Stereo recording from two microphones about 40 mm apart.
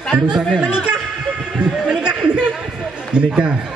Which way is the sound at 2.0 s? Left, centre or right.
Right.